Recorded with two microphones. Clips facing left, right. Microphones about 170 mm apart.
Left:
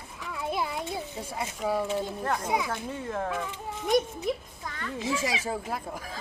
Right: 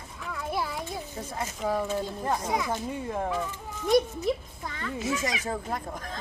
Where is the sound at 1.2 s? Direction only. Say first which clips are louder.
Even; 10° left (ahead or behind).